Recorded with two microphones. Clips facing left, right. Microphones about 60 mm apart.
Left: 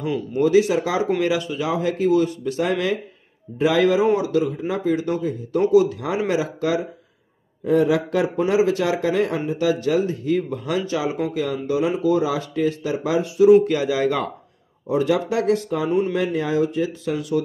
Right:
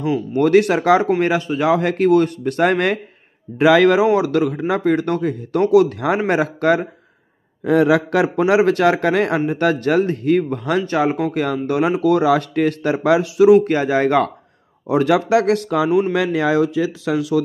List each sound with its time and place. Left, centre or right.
0.3 s a man's voice: right
1.2 s speech: right
1.6 s a man's voice: right
3.5 s a man's voice: right
7.6 s a man's voice: right
13.7 s speech: right
14.9 s speech: right